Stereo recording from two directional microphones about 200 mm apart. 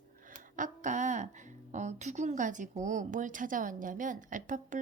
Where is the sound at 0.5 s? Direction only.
40° right (ahead or behind).